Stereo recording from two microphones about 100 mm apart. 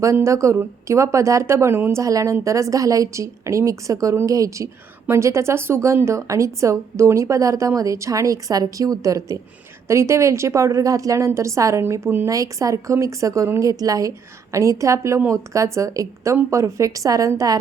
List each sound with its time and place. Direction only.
0.0 s a woman's voice: 30° right (ahead or behind)